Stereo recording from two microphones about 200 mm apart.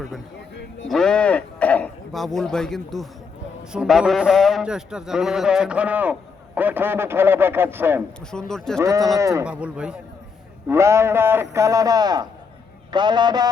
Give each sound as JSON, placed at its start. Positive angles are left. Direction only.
{"t": 0.9, "sound": "a man's voice", "side_deg": 5}
{"t": 8.3, "sound": "a man's voice", "side_deg": 5}
{"t": 8.8, "sound": "a man's voice", "side_deg": -15}
{"t": 9.5, "sound": "a man's voice", "side_deg": -5}